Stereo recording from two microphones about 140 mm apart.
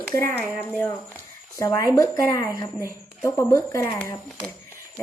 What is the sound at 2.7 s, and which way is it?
Speech, 20° right (ahead or behind).